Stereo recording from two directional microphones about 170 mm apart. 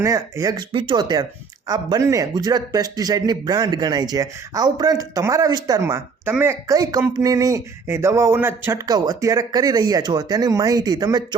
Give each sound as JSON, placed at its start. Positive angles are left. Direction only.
{"t": 0.0, "sound": "speech", "side_deg": -20}